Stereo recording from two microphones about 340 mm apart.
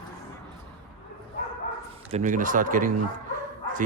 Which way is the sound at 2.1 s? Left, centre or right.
Right.